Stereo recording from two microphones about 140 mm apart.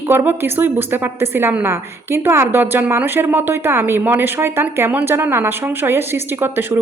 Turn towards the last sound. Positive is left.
turn(degrees=-15)  # may be behind; listen again after turning